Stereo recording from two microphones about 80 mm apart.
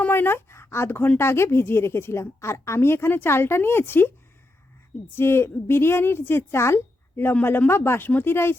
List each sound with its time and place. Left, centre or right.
0.0 s a woman's voice: left
5.1 s a woman's voice: left